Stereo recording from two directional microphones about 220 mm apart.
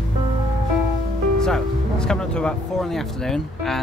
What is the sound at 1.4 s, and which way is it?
Speech, 5° left (ahead or behind).